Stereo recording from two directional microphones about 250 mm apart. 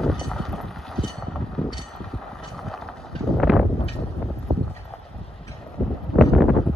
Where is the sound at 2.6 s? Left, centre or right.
Centre.